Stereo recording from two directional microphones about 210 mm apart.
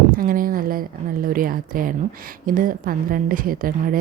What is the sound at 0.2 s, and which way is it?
A woman's voice, 40° right (ahead or behind).